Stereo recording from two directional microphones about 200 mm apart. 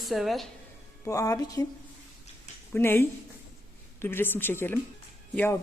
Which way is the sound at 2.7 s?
10° left (ahead or behind).